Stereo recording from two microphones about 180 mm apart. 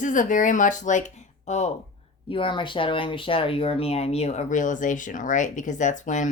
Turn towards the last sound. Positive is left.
turn(degrees=45)  # may be behind; listen again after turning